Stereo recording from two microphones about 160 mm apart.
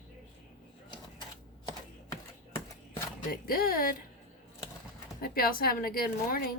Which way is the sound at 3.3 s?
65° left (ahead or behind).